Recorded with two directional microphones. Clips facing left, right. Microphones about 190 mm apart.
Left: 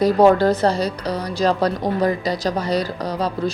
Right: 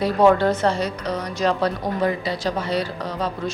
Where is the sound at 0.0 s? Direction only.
35° left (ahead or behind).